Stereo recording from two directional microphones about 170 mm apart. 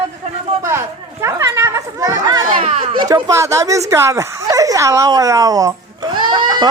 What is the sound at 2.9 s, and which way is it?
Speech, 20° right (ahead or behind).